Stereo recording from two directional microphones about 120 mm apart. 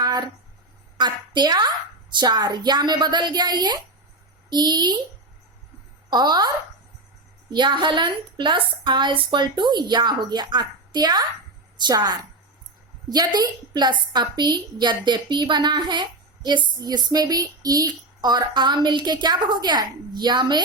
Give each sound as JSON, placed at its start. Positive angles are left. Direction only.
{"t": 0.0, "sound": "a sound", "side_deg": -35}
{"t": 0.9, "sound": "a woman's voice", "side_deg": -40}
{"t": 6.1, "sound": "a woman's voice", "side_deg": -35}
{"t": 7.5, "sound": "a woman's voice", "side_deg": -40}